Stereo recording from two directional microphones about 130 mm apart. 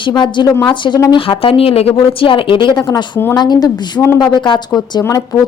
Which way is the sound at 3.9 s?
15° left (ahead or behind).